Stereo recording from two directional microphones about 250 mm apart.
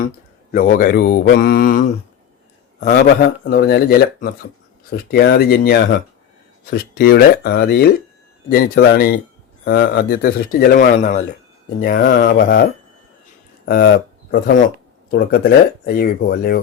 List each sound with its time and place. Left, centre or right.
0.5 s speech: left
2.8 s speech: left
13.7 s speech: left